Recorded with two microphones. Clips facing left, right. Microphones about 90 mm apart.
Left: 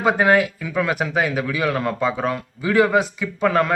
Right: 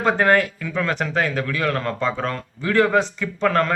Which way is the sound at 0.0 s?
5° left (ahead or behind).